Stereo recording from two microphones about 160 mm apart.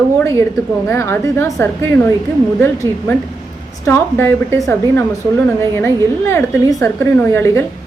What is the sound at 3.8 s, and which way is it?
Speech, 15° left (ahead or behind).